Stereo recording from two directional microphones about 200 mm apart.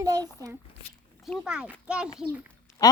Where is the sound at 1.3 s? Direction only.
5° right (ahead or behind).